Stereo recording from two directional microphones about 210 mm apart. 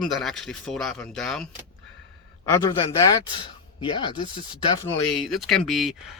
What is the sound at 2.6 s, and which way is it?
Speech, 15° left (ahead or behind).